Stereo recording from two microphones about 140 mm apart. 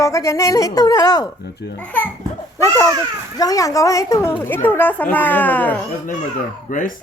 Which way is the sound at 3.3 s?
25° left (ahead or behind).